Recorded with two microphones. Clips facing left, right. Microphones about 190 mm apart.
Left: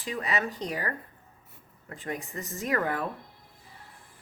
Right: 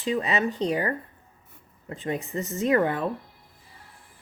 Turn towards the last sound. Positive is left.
turn(degrees=-25)  # may be behind; listen again after turning